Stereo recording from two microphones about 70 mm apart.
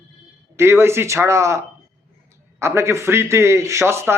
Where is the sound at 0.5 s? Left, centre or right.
Right.